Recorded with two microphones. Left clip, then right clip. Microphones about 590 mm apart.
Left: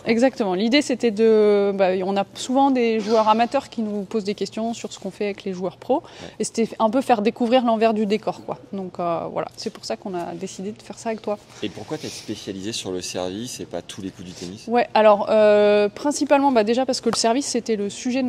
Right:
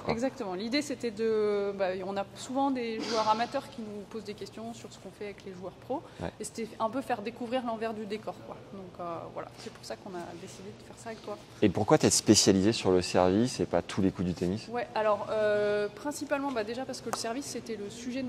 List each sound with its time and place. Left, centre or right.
0.0 s speech: left
11.6 s speech: right
12.6 s speech: right
14.7 s speech: left